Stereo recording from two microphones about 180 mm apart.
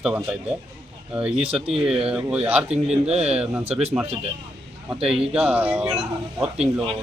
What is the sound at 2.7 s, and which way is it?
A man's voice, 35° right (ahead or behind).